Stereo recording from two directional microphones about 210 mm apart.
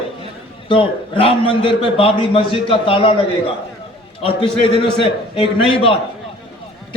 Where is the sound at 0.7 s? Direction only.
25° left (ahead or behind).